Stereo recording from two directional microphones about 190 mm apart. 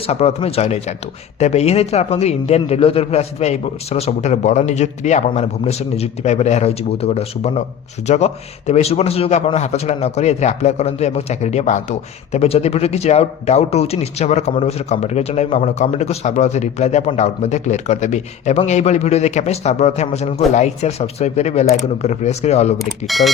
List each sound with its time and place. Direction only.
0.1 s a man's voice: 35° left (ahead or behind)
22.8 s speech: centre (ahead or behind)